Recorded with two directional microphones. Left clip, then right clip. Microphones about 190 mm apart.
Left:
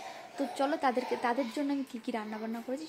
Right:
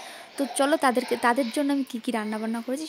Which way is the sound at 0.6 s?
50° right (ahead or behind).